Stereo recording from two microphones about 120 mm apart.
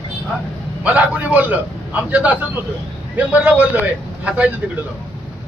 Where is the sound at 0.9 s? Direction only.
10° right (ahead or behind).